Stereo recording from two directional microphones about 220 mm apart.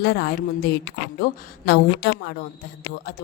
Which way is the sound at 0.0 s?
45° left (ahead or behind).